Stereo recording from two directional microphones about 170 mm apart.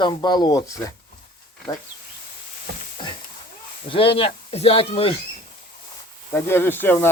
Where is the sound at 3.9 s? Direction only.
30° left (ahead or behind).